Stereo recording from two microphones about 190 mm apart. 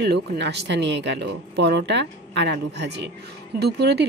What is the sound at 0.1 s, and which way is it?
A woman's voice, 65° right (ahead or behind).